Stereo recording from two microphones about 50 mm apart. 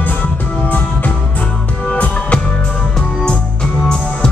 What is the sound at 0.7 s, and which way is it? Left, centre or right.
Music, left.